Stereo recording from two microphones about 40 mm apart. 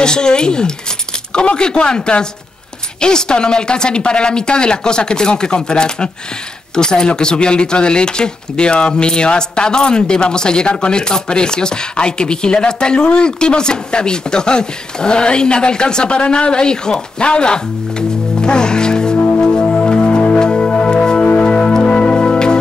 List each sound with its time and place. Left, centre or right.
0.0 s speech: centre
19.4 s music: centre
21.2 s music: left